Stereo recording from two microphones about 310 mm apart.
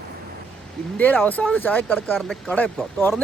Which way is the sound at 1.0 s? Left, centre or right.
Centre.